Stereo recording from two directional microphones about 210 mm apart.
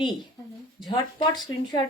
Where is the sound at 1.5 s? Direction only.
75° left (ahead or behind).